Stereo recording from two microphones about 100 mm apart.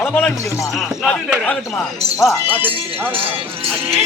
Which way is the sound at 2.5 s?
20° right (ahead or behind).